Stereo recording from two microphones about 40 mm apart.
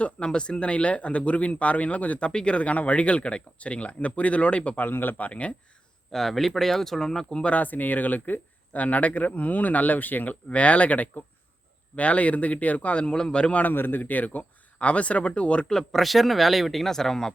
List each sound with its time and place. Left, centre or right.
0.3 s speech: left
2.3 s speech: left
4.8 s speech: left
5.1 s speech: left
6.1 s speech: centre
7.4 s a man's voice: left
13.6 s speech: left
15.8 s speech: centre